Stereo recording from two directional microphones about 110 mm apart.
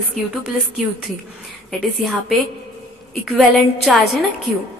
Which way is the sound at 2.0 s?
Centre (ahead or behind).